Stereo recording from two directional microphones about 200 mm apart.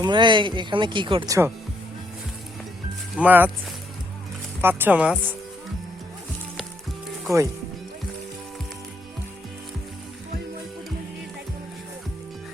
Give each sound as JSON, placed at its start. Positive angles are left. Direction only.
{"t": 0.0, "sound": "speech", "side_deg": -25}
{"t": 3.2, "sound": "speech", "side_deg": -10}
{"t": 4.6, "sound": "speech", "side_deg": -10}
{"t": 7.3, "sound": "speech", "side_deg": -15}